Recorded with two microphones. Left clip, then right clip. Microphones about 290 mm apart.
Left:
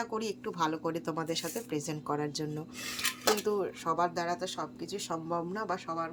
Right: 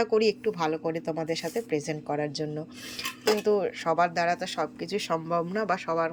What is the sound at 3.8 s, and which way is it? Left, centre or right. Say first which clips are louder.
Speech: right 6 dB; centre.